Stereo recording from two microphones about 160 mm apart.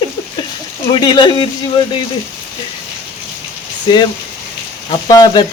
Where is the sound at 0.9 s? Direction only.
30° left (ahead or behind).